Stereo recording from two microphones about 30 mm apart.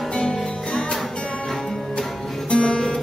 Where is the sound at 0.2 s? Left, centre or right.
Left.